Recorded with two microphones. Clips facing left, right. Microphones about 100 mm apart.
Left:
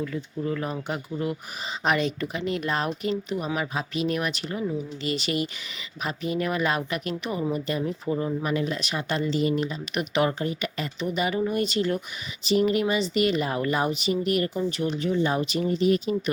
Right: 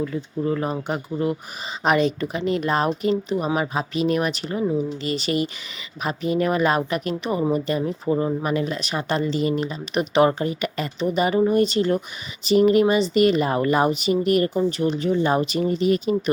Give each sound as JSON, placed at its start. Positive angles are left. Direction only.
{"t": 0.0, "sound": "speech", "side_deg": -30}
{"t": 1.8, "sound": "speech", "side_deg": -45}
{"t": 10.4, "sound": "speech", "side_deg": -50}
{"t": 11.0, "sound": "speech", "side_deg": -35}
{"t": 12.5, "sound": "speech", "side_deg": -45}